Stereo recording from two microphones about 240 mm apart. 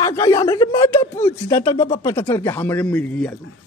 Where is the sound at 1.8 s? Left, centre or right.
Left.